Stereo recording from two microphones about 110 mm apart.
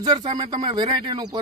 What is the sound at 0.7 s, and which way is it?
Speech, 50° right (ahead or behind).